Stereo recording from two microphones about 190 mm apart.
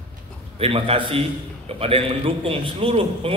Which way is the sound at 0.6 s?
30° right (ahead or behind).